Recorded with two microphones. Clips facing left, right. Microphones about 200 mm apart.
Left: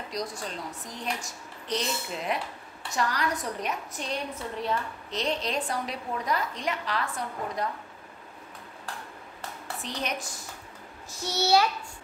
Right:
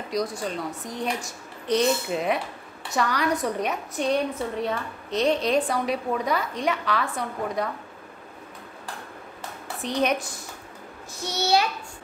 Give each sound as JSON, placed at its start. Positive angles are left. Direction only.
{"t": 0.1, "sound": "a woman's voice", "side_deg": -60}
{"t": 9.8, "sound": "a woman's voice", "side_deg": -60}
{"t": 11.2, "sound": "a child's voice", "side_deg": -20}